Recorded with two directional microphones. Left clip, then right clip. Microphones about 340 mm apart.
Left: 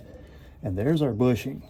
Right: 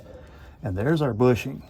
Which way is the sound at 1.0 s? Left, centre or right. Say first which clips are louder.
Right 5 dB; centre.